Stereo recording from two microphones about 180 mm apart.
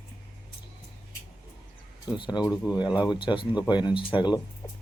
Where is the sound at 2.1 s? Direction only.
25° left (ahead or behind).